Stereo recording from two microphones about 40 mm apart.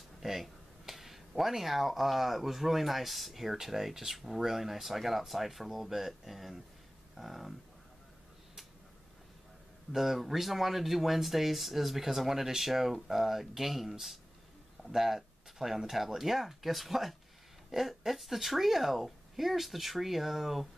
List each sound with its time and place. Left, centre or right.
0.2 s speech: centre
9.9 s speech: centre